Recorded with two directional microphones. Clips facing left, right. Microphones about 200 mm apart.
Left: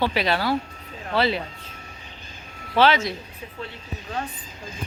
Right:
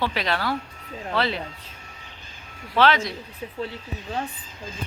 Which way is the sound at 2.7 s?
5° left (ahead or behind).